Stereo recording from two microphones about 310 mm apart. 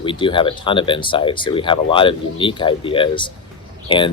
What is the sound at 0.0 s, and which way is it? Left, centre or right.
Speech, centre.